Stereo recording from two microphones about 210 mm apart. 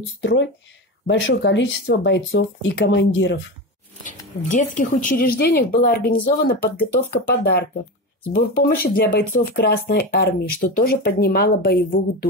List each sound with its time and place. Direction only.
0.2 s speech: 60° left (ahead or behind)
4.0 s speech: 35° left (ahead or behind)